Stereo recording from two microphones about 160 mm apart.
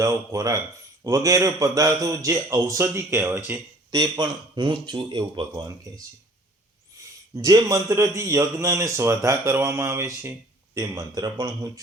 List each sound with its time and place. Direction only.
0.0 s a man's voice: 20° right (ahead or behind)
4.2 s a man's voice: 30° right (ahead or behind)
7.0 s a sound: 20° right (ahead or behind)
7.3 s a man's voice: 20° right (ahead or behind)